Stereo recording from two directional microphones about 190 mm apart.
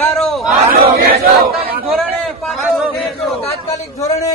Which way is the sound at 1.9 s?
Centre (ahead or behind).